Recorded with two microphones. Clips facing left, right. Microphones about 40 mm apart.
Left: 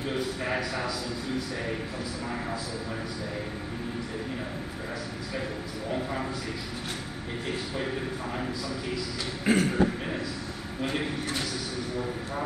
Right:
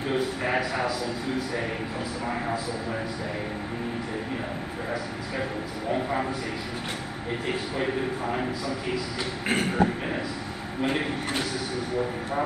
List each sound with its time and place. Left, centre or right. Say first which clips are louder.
0.1 s a man's voice: right 5 dB; centre
2.2 s a man's voice: right 6 dB; centre
7.7 s a man's voice: right 4 dB; right
9.5 s a sound: left 2 dB; right
9.8 s a man's voice: right 2 dB; centre